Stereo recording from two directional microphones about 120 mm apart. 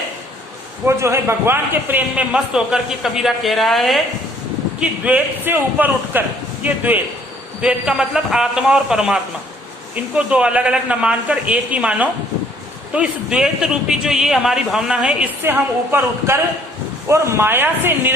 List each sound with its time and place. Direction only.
0.9 s a man's voice: 25° right (ahead or behind); by 4.0 s centre (ahead or behind)
4.8 s a man's voice: 10° right (ahead or behind)
15.4 s speech: 20° right (ahead or behind)